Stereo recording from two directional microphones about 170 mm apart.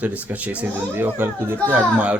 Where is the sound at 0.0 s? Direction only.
10° right (ahead or behind).